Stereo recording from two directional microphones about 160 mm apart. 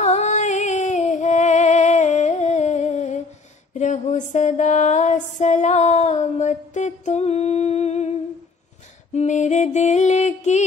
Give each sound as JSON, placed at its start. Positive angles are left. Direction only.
{"t": 0.0, "sound": "music", "side_deg": 45}
{"t": 9.1, "sound": "music", "side_deg": 50}